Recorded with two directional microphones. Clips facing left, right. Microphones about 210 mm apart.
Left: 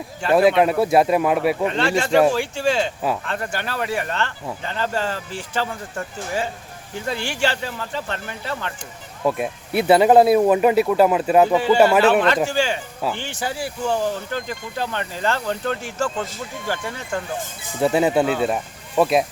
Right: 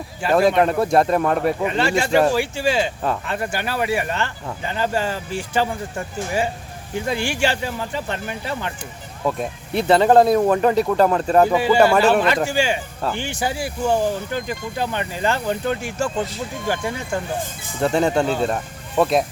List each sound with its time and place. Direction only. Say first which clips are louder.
0.3 s speech: left 1 dB; 5° left (ahead or behind)
1.6 s speech: even; 5° right (ahead or behind)
9.2 s speech: left 2 dB; 10° left (ahead or behind)
11.4 s speech: even; 10° right (ahead or behind)
17.7 s speech: left 1 dB; 5° left (ahead or behind)